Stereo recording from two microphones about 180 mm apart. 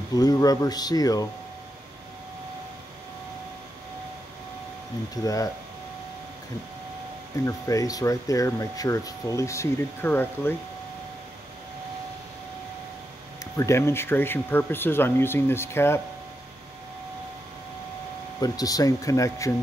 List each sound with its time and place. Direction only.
0.1 s speech: 20° left (ahead or behind)
5.1 s speech: 20° left (ahead or behind)
7.4 s speech: 20° left (ahead or behind)
13.4 s speech: 15° left (ahead or behind)
18.4 s speech: 20° left (ahead or behind)